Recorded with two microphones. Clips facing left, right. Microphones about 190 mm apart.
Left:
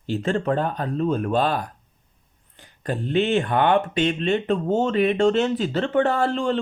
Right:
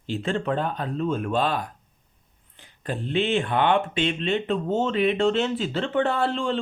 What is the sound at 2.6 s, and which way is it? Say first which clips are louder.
Speech: left 3 dB; 45° left (ahead or behind).